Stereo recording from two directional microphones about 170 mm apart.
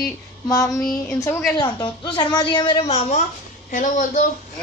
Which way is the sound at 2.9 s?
45° left (ahead or behind).